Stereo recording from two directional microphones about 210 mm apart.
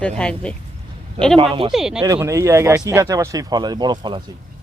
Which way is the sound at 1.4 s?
25° right (ahead or behind).